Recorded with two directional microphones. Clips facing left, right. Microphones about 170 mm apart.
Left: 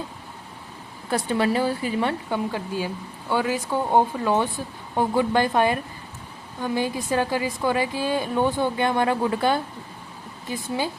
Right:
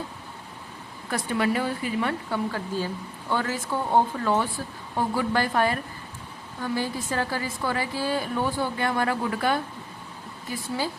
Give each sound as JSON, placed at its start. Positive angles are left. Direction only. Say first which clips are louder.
{"t": 1.1, "sound": "a woman's voice", "louder": "left 3 dB", "side_deg": 30}
{"t": 2.3, "sound": "a woman's voice", "louder": "left 2 dB", "side_deg": 15}